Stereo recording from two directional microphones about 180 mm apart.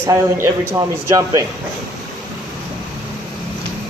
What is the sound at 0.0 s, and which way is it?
Speech, 15° right (ahead or behind).